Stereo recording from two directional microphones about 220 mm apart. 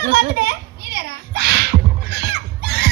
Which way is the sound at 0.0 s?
45° right (ahead or behind).